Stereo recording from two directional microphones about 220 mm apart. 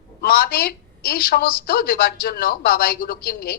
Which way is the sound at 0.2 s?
45° left (ahead or behind).